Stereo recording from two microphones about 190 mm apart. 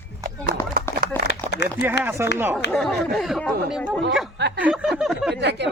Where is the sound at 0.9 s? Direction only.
15° left (ahead or behind).